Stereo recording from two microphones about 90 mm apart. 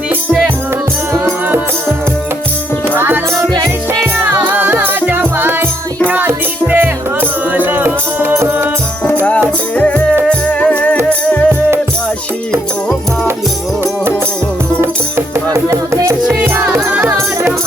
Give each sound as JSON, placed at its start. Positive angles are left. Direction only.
{"t": 1.2, "sound": "music", "side_deg": -20}
{"t": 2.9, "sound": "music", "side_deg": -20}
{"t": 4.2, "sound": "music", "side_deg": -20}
{"t": 9.7, "sound": "music", "side_deg": 20}
{"t": 15.5, "sound": "speech", "side_deg": -35}
{"t": 16.2, "sound": "music", "side_deg": -15}